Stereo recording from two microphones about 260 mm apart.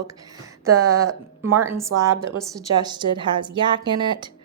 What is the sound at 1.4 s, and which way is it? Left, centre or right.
Speech, right.